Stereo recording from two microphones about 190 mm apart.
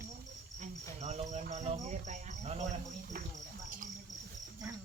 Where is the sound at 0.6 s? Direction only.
35° right (ahead or behind).